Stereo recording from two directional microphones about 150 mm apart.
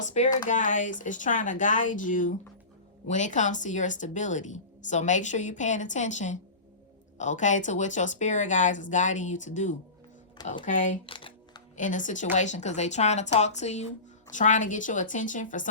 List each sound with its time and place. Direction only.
0.0 s a woman's voice: 55° left (ahead or behind)
11.0 s crumpling: 35° left (ahead or behind)
11.8 s a woman's voice: 60° left (ahead or behind)